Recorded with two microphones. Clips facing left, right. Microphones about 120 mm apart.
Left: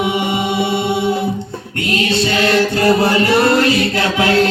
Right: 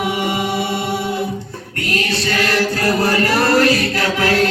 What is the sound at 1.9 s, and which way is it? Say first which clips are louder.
Music: left 4 dB; 25° left (ahead or behind).